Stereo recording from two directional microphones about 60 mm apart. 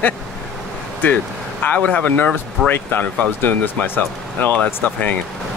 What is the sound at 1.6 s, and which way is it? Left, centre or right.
Speech, left.